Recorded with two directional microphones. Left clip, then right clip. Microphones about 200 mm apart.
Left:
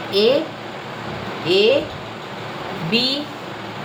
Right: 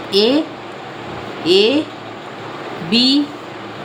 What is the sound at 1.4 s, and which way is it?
Speech, 45° right (ahead or behind).